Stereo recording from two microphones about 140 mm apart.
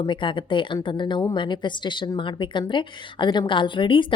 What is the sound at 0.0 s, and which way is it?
A woman's voice, 35° left (ahead or behind).